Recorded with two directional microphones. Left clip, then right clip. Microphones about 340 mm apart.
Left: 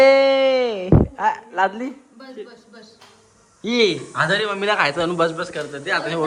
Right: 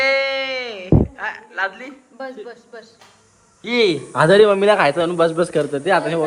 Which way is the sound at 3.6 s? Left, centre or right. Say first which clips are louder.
Right 1 dB; centre.